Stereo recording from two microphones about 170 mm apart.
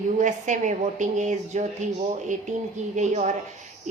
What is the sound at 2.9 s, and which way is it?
Speech, 45° right (ahead or behind).